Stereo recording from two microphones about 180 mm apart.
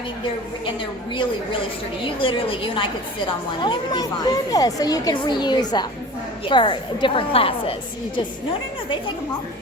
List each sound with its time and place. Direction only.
2.0 s speech: 30° left (ahead or behind)